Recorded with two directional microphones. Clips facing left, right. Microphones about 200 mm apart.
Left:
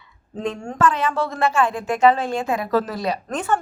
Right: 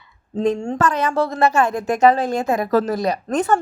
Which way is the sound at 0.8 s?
40° right (ahead or behind).